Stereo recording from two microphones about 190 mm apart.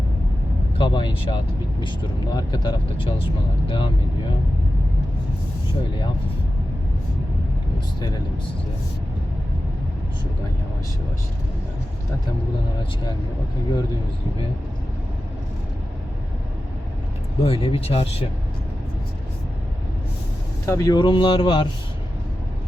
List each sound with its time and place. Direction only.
0.8 s speech: 25° left (ahead or behind)
17.4 s speech: 30° left (ahead or behind)
20.7 s speech: 15° left (ahead or behind)